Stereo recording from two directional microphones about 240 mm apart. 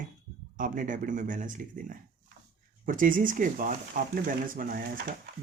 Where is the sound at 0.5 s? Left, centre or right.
Right.